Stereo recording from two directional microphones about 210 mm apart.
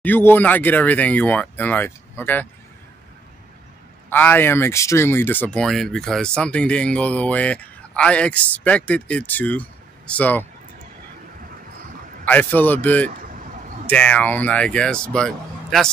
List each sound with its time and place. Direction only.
0.0 s speech: 10° left (ahead or behind)
4.1 s speech: 10° left (ahead or behind)
12.3 s speech: 10° left (ahead or behind)
13.3 s a sound: 40° right (ahead or behind)
13.8 s speech: 5° left (ahead or behind)